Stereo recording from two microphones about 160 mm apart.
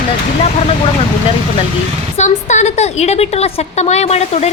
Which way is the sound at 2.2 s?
45° left (ahead or behind).